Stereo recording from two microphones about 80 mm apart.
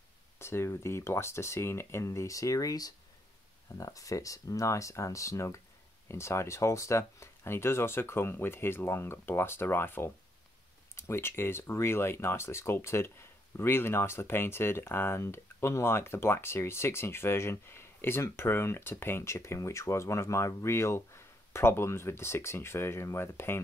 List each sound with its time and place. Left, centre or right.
0.4 s speech: left